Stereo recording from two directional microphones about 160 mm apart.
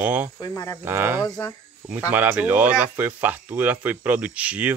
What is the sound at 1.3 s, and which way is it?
Speech, 25° left (ahead or behind).